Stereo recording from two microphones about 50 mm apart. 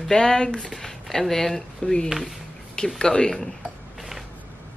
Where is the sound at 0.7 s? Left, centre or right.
Centre.